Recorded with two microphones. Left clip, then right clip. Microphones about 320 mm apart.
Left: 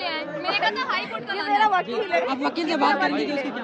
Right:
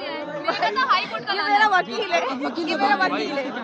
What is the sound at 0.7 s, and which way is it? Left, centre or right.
Speech, centre.